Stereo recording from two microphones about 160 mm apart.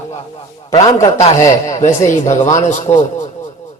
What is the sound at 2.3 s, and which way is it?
Speech, 45° left (ahead or behind).